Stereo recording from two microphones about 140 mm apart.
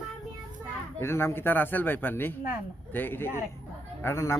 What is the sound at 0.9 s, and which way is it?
Speech, 20° left (ahead or behind).